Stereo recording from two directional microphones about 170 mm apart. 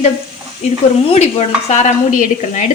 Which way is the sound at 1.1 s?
40° left (ahead or behind).